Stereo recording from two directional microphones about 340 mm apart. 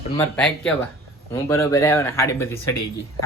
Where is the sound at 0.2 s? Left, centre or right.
Centre.